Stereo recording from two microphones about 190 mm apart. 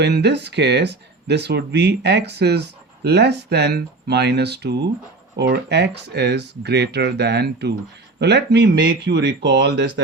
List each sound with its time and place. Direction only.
0.0 s speech: 60° right (ahead or behind)